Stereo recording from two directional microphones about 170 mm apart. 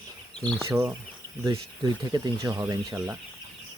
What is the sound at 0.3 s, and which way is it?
Speech, 5° left (ahead or behind).